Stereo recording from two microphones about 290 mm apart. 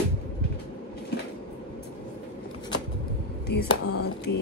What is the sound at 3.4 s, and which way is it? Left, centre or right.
Speech, left.